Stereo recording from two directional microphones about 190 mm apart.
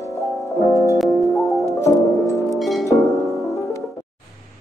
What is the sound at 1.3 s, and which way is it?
Music, 15° left (ahead or behind).